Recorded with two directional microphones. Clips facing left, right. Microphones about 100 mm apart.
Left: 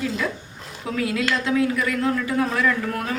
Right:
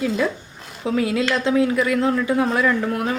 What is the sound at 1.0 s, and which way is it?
A woman's voice, 25° right (ahead or behind).